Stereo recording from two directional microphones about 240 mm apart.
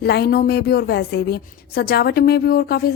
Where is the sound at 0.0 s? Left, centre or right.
Left.